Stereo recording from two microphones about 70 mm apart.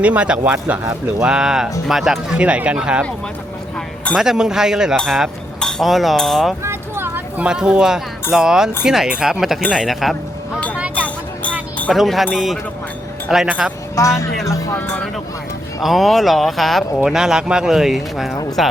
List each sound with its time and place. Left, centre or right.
0.0 s speech: centre
2.4 s speech: centre
4.1 s speech: centre
6.6 s a sound: right
7.3 s speech: centre
10.9 s a sound: centre
11.9 s speech: centre
13.5 s speech: centre
14.0 s speech: left
14.8 s speech: left
15.8 s speech: centre